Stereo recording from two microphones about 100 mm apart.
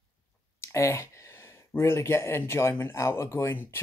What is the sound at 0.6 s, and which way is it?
Speech, 30° left (ahead or behind).